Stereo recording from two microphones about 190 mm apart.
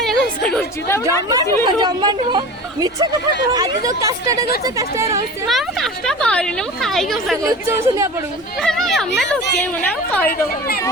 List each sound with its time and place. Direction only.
0.0 s a sound: centre (ahead or behind)
1.3 s speech: 20° right (ahead or behind)
3.5 s speech: 20° right (ahead or behind)
5.5 s speech: centre (ahead or behind)
7.4 s speech: 15° right (ahead or behind)
8.6 s a woman's voice: centre (ahead or behind)
10.2 s speech: 55° left (ahead or behind)